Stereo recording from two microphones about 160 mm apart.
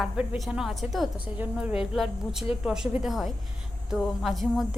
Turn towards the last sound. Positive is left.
turn(degrees=0)  # may be behind; listen again after turning